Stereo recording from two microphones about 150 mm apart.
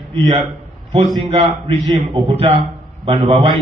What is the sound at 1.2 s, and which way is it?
A man's voice, 35° right (ahead or behind).